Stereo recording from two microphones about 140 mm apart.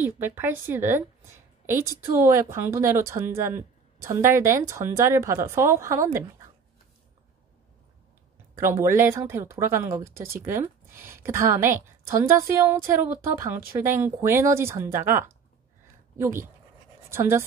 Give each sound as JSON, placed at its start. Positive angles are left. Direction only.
{"t": 0.0, "sound": "a woman's voice", "side_deg": -15}
{"t": 8.5, "sound": "a woman's voice", "side_deg": -20}